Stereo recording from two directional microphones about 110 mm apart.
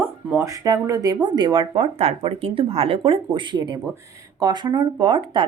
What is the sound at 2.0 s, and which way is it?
A woman's voice, 65° right (ahead or behind).